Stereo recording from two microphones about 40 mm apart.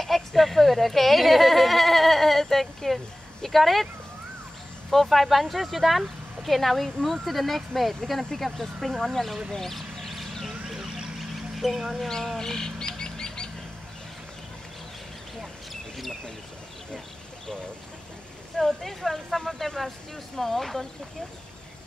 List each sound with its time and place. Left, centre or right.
0.0 s sheep: centre
3.4 s speech: centre
4.9 s speech: centre
9.5 s a sound: centre
10.7 s a sound: centre
11.7 s speech: centre
12.4 s bird: centre
15.7 s bird: centre
18.6 s speech: centre